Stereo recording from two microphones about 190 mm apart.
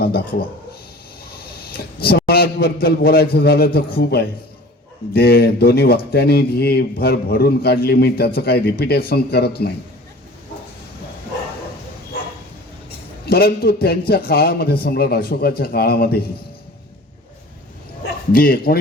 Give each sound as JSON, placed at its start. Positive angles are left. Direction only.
{"t": 0.0, "sound": "a man's voice", "side_deg": 55}
{"t": 13.2, "sound": "a man's voice", "side_deg": 55}
{"t": 18.0, "sound": "a man's voice", "side_deg": 50}